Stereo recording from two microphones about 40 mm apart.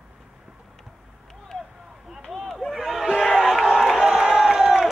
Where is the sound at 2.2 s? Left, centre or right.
Centre.